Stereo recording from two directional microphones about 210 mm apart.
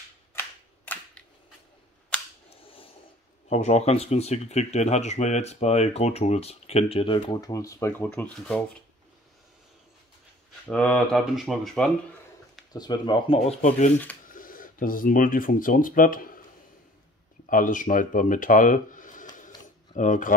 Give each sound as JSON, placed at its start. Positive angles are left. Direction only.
{"t": 0.9, "sound": "cap gun", "side_deg": 5}
{"t": 3.4, "sound": "speech", "side_deg": 30}
{"t": 10.7, "sound": "speech", "side_deg": 5}
{"t": 12.7, "sound": "speech", "side_deg": 20}
{"t": 17.5, "sound": "speech", "side_deg": 40}